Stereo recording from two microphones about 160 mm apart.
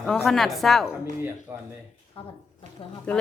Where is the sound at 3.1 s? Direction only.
5° left (ahead or behind).